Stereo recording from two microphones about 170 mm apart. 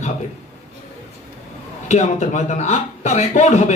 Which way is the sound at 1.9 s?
40° left (ahead or behind).